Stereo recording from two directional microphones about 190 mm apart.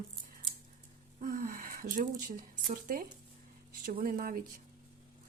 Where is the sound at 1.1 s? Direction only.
45° right (ahead or behind).